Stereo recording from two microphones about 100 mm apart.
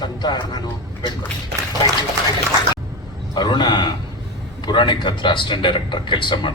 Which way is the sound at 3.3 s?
45° left (ahead or behind).